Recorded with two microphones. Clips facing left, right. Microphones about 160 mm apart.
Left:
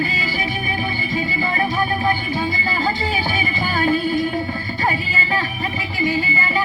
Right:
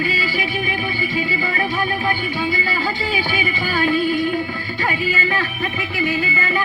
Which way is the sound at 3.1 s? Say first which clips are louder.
Even; 40° left (ahead or behind).